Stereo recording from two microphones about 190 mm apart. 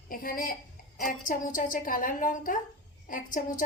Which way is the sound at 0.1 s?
50° left (ahead or behind).